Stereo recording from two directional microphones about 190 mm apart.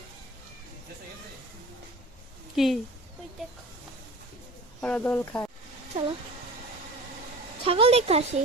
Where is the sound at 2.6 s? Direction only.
Centre (ahead or behind).